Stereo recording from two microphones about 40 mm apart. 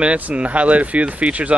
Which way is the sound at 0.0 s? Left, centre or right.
Right.